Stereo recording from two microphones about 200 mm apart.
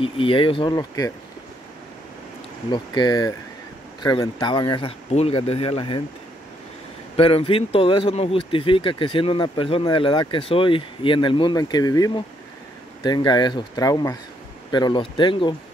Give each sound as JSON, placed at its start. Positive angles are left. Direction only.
{"t": 0.0, "sound": "speech", "side_deg": 25}
{"t": 2.7, "sound": "speech", "side_deg": 20}
{"t": 7.2, "sound": "speech", "side_deg": 25}